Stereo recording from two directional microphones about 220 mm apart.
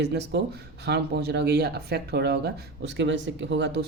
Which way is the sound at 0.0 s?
50° right (ahead or behind).